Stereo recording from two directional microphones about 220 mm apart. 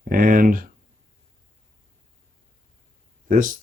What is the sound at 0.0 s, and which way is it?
Speech, 40° right (ahead or behind).